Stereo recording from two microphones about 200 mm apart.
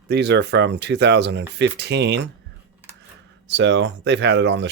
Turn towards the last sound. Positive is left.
turn(degrees=-60)  # may be behind; listen again after turning